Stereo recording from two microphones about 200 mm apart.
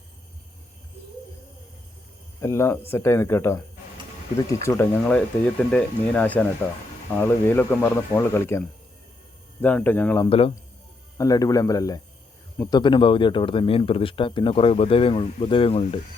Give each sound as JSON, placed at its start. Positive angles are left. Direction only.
{"t": 2.4, "sound": "speech", "side_deg": 15}
{"t": 10.2, "sound": "speech", "side_deg": 30}
{"t": 11.2, "sound": "speech", "side_deg": 15}